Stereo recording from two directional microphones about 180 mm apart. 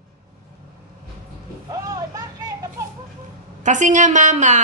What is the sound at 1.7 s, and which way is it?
Vehicle, 20° right (ahead or behind).